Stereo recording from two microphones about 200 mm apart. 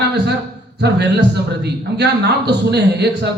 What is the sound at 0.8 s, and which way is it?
A man's voice, 55° right (ahead or behind).